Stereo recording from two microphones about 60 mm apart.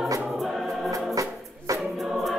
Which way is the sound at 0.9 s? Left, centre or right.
Right.